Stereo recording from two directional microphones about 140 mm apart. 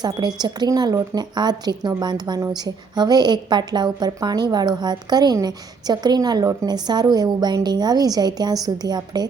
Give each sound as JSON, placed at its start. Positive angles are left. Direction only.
{"t": 0.0, "sound": "a woman's voice", "side_deg": -30}